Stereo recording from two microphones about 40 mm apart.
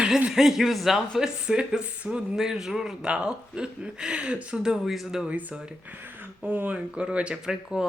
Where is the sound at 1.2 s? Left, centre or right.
Right.